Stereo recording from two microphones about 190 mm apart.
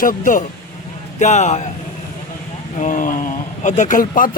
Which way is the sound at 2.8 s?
45° left (ahead or behind).